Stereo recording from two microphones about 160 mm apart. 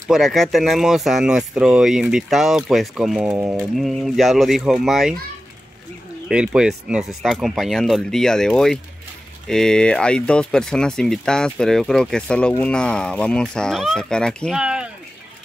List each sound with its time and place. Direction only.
0.1 s speech: centre (ahead or behind)
3.3 s pigeon: 15° right (ahead or behind)
3.7 s speech: centre (ahead or behind)
6.2 s speech: 5° right (ahead or behind)